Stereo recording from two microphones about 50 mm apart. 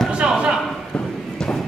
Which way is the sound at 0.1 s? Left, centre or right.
Right.